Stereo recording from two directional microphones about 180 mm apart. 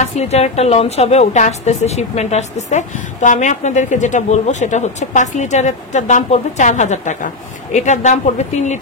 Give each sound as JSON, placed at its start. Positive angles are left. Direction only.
{"t": 0.0, "sound": "a woman's voice", "side_deg": 35}